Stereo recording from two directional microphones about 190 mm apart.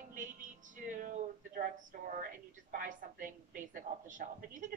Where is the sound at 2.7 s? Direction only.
45° right (ahead or behind).